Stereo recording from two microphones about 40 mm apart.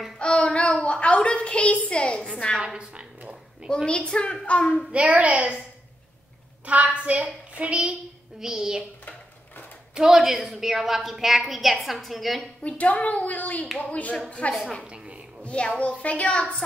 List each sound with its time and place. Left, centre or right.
0.2 s a sound: left
1.2 s a child's voice: left
2.6 s a woman's voice: right
3.7 s a child's voice: left
4.9 s a woman's voice: right
6.6 s a woman's voice: right
8.4 s a child's voice: centre
9.9 s a woman's voice: centre
12.6 s a woman's voice: left